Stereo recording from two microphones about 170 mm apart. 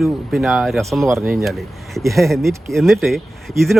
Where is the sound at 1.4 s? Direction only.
Centre (ahead or behind).